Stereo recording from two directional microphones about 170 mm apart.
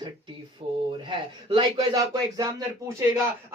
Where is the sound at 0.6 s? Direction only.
35° right (ahead or behind).